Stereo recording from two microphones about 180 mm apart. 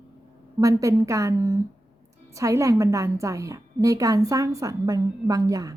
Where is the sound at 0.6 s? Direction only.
15° right (ahead or behind).